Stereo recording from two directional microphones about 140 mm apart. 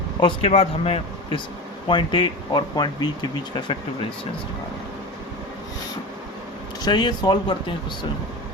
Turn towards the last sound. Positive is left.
turn(degrees=30)  # may be behind; listen again after turning